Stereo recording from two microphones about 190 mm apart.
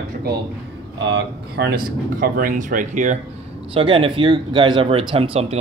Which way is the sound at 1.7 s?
50° right (ahead or behind).